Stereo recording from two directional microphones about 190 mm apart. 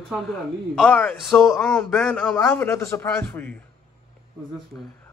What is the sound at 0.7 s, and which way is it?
A man's voice, 5° left (ahead or behind).